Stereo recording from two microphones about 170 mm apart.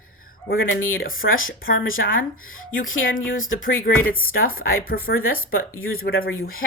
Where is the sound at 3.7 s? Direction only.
60° left (ahead or behind).